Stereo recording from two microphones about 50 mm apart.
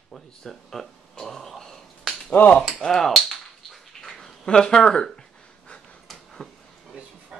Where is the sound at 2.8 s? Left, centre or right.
Centre.